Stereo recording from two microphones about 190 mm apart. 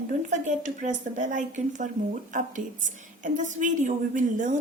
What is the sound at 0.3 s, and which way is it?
A woman's voice, 40° right (ahead or behind).